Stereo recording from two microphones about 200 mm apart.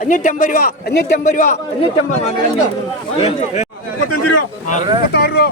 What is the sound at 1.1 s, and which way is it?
Speech, 40° left (ahead or behind).